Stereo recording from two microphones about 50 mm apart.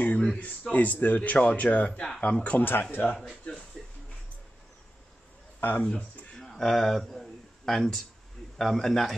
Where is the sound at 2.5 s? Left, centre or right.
Left.